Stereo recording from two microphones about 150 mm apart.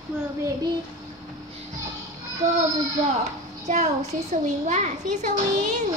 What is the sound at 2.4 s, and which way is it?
Speech, 50° right (ahead or behind).